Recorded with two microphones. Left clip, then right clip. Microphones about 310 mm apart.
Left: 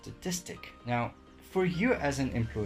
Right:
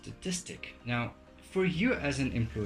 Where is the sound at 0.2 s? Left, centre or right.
Left.